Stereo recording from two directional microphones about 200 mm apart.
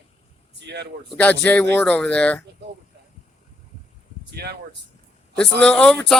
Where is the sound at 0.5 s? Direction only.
60° right (ahead or behind).